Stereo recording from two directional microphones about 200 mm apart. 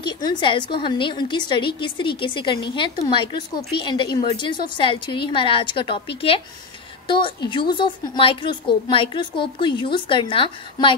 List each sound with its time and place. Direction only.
0.0 s a woman's voice: 20° left (ahead or behind)